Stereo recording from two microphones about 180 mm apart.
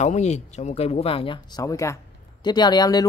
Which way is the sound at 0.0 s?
40° left (ahead or behind).